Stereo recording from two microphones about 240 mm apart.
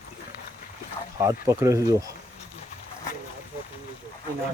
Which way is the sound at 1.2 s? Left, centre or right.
Centre.